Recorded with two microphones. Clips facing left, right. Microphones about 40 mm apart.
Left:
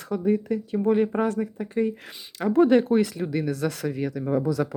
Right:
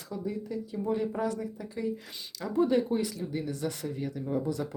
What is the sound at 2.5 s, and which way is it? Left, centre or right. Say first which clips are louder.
Speech: left 8 dB; left.